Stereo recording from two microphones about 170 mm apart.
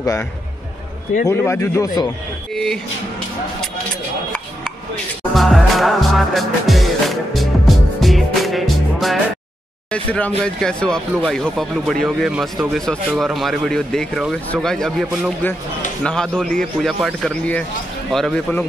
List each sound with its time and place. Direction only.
1.3 s speech: 15° left (ahead or behind)
2.5 s speech: centre (ahead or behind)
5.3 s music: centre (ahead or behind)
9.8 s speech: 5° left (ahead or behind)